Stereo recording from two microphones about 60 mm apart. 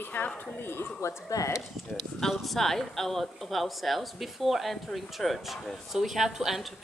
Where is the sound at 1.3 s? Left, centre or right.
Left.